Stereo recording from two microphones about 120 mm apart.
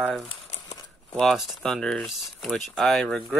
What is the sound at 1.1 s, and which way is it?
Speech, centre (ahead or behind).